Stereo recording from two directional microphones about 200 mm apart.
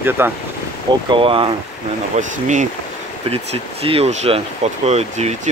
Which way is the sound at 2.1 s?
35° right (ahead or behind).